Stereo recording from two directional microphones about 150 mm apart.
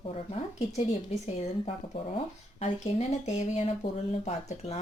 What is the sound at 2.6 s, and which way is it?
A woman's voice, 50° left (ahead or behind).